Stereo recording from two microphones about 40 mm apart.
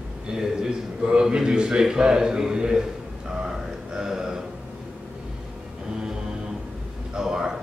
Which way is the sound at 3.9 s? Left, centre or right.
Centre.